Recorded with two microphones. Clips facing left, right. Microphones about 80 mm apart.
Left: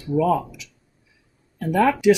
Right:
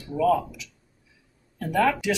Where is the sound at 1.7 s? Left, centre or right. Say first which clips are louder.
Left 6 dB; centre.